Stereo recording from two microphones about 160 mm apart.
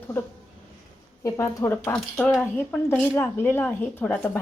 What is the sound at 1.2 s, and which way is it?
Speech, 20° left (ahead or behind).